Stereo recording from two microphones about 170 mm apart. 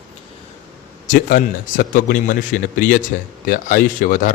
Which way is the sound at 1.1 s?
50° left (ahead or behind).